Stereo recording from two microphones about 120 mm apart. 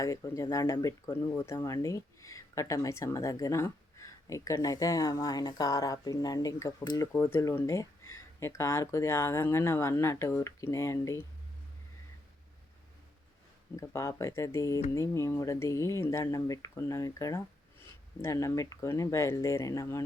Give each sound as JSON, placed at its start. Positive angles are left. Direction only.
{"t": 0.0, "sound": "speech", "side_deg": 30}
{"t": 13.7, "sound": "speech", "side_deg": 25}